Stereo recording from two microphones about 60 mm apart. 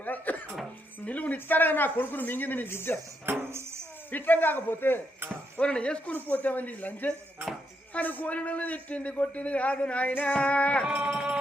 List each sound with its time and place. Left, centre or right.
0.0 s a sound: left
1.0 s speech: left
3.2 s music: right
4.1 s speech: left
5.2 s speech: right
5.5 s a man's voice: centre